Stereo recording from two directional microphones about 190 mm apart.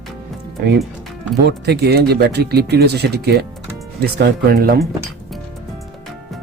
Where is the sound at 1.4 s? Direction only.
60° right (ahead or behind).